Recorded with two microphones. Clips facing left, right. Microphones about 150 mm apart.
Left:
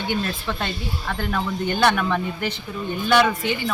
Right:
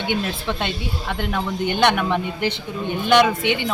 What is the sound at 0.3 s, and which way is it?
Speech, 15° right (ahead or behind).